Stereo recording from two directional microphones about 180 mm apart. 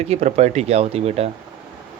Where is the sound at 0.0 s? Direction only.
35° right (ahead or behind).